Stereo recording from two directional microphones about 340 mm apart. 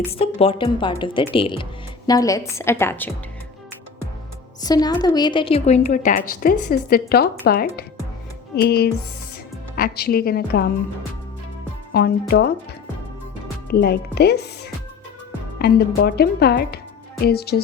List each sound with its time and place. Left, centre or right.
0.1 s a woman's voice: centre
4.6 s a woman's voice: centre; by 10.7 s left
11.9 s speech: left
13.7 s a woman's voice: left